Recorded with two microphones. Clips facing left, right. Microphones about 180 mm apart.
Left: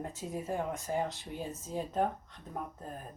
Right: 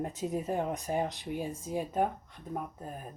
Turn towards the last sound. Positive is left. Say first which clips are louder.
# right 1 dB
turn(degrees=-10)  # may be behind; listen again after turning